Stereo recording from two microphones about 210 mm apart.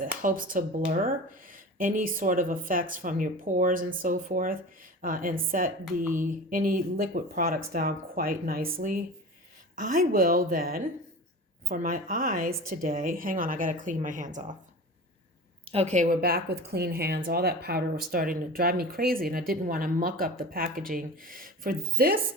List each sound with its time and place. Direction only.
0.0 s speech: 40° right (ahead or behind)
15.7 s speech: 30° right (ahead or behind)